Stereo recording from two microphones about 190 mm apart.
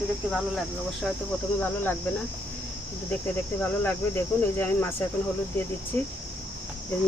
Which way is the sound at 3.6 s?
10° left (ahead or behind).